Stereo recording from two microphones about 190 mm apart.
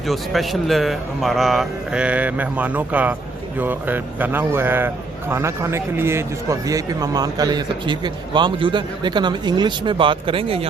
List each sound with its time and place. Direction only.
0.1 s a man's voice: centre (ahead or behind); by 10.7 s 30° right (ahead or behind)